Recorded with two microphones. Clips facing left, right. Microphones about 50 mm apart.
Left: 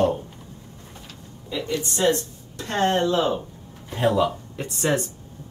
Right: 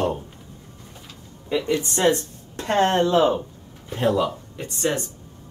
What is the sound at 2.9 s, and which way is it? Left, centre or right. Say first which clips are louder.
Speech: right 3 dB; right.